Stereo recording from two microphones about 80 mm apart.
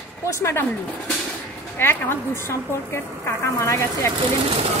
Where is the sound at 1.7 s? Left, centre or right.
Left.